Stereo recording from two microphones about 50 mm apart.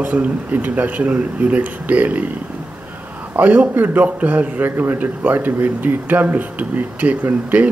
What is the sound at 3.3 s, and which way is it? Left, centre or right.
A man's voice, right.